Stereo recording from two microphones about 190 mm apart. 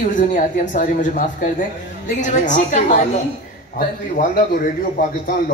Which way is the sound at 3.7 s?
55° left (ahead or behind).